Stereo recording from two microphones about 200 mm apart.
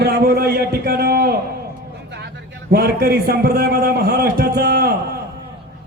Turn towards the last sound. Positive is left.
turn(degrees=-50)  # may be behind; listen again after turning